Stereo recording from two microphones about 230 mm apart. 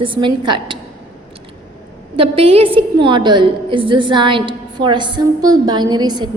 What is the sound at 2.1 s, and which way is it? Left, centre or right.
A woman's voice, right.